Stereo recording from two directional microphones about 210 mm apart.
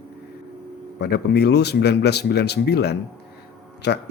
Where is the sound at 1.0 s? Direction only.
50° left (ahead or behind).